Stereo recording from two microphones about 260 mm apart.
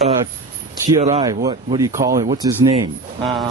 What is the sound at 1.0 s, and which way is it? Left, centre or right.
Speech, centre.